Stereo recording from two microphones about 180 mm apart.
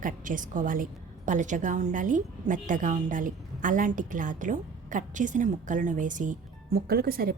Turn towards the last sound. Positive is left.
turn(degrees=-55)  # may be behind; listen again after turning